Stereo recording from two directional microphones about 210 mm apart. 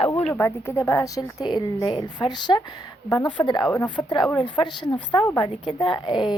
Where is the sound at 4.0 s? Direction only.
20° left (ahead or behind).